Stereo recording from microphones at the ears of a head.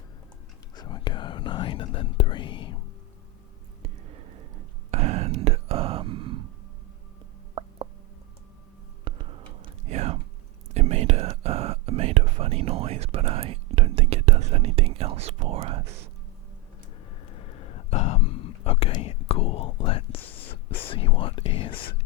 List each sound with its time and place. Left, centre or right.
0.8 s whispering: left
3.8 s whispering: right
9.0 s whispering: right
17.3 s whispering: left